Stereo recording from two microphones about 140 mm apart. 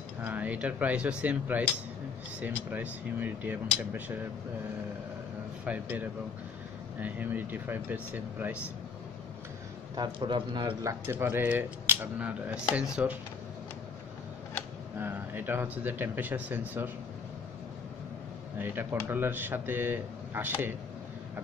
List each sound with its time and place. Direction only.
0.2 s speech: 10° right (ahead or behind)
5.7 s speech: 10° right (ahead or behind)
9.9 s speech: 35° right (ahead or behind); by 13.2 s 10° right (ahead or behind)
15.0 s speech: 15° right (ahead or behind)
18.6 s speech: 15° right (ahead or behind)